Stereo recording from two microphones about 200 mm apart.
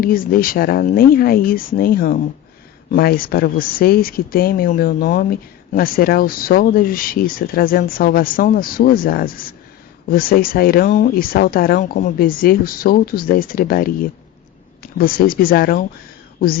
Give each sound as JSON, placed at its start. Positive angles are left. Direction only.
{"t": 0.0, "sound": "speech", "side_deg": 45}